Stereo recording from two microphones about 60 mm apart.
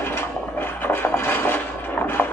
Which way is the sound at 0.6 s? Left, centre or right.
Left.